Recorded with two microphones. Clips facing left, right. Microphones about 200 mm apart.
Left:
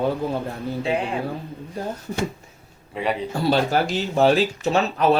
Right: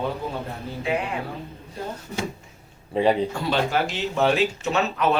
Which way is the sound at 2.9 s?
30° right (ahead or behind).